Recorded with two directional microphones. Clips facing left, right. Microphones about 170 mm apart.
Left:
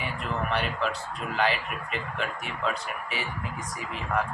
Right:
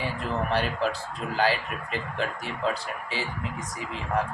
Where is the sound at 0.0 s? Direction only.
35° right (ahead or behind).